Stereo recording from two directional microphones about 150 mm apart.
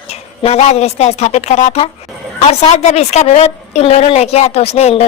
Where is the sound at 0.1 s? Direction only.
45° left (ahead or behind).